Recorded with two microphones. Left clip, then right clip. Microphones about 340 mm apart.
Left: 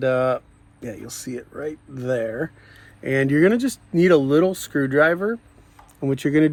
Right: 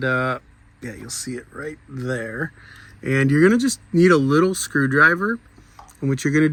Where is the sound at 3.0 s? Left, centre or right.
Centre.